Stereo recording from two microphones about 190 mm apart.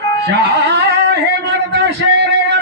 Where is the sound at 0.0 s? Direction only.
60° right (ahead or behind).